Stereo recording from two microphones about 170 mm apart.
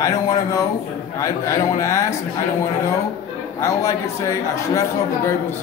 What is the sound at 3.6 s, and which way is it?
A man's voice, 20° left (ahead or behind).